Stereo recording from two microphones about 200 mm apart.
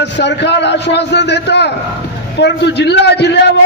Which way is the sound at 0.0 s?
60° left (ahead or behind).